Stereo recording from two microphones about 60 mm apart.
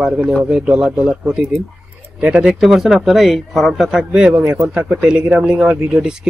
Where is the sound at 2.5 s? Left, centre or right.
Centre.